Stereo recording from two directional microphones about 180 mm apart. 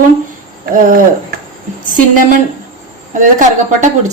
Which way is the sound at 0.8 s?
50° right (ahead or behind).